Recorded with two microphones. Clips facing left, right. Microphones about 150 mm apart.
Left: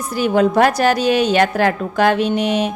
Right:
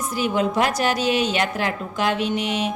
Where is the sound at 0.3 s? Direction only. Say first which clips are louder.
Left 8 dB; 50° left (ahead or behind).